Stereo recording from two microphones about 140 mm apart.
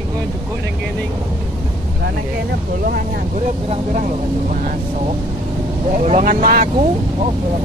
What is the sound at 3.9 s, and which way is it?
Speech, 65° right (ahead or behind).